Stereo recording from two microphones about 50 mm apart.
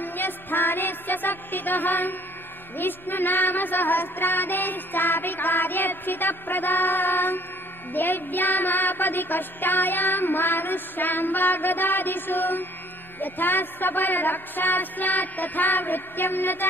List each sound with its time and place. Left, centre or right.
0.0 s music: left